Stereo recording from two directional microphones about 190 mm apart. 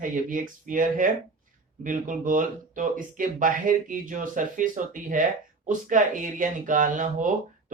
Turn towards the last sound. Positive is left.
turn(degrees=-45)  # may be behind; listen again after turning